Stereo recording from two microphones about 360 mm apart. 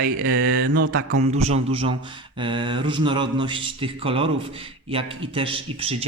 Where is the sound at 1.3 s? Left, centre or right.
Centre.